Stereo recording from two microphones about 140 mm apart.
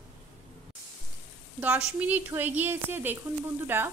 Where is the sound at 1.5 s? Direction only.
10° right (ahead or behind).